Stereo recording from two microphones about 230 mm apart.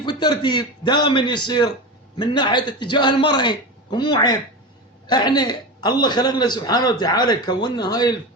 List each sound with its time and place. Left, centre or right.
0.0 s a man's voice: centre